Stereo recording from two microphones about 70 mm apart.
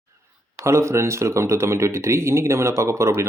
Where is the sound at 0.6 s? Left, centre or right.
Right.